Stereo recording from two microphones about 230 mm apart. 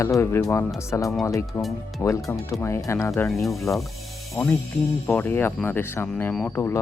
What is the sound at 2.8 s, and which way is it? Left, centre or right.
Speech, centre.